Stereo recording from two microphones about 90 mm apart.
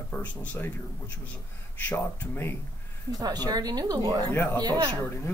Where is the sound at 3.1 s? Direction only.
50° right (ahead or behind).